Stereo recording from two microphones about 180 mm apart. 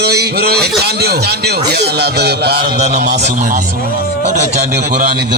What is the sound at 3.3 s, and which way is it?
Speech, 45° right (ahead or behind).